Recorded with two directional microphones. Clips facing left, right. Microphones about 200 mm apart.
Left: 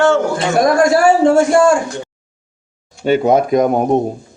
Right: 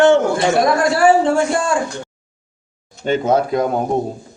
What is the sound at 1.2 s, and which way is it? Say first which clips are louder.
Speech: left 6 dB; 45° left (ahead or behind).